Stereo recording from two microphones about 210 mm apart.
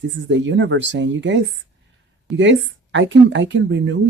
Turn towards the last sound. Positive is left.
turn(degrees=-60)  # may be behind; listen again after turning